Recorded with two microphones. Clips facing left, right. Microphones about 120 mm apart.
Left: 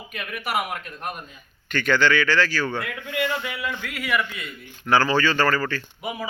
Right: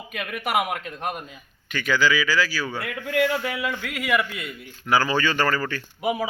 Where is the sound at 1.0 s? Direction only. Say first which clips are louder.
Right 4 dB; 80° right.